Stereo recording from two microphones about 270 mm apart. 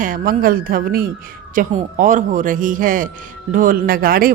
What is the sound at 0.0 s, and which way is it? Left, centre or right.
A woman's voice, right.